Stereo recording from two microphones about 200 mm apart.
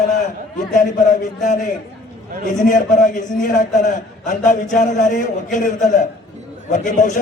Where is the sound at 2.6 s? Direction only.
40° left (ahead or behind).